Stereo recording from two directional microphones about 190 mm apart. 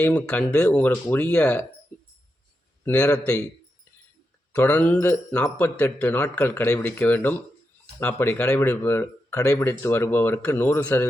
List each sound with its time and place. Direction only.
0.0 s speech: 5° left (ahead or behind)
2.8 s speech: 5° left (ahead or behind)
4.5 s speech: 10° left (ahead or behind)